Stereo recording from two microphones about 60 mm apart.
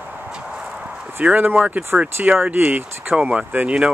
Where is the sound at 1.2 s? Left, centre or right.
Right.